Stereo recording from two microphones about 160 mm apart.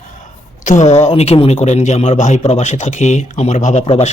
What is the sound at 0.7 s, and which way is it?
Speech, 45° left (ahead or behind).